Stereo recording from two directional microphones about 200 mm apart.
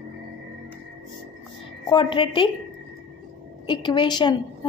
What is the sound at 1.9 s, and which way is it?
Speech, 25° left (ahead or behind).